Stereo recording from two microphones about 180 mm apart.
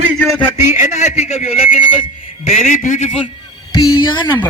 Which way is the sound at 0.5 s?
40° left (ahead or behind).